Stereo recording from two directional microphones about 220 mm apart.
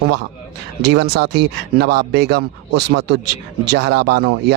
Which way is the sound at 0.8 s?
50° right (ahead or behind).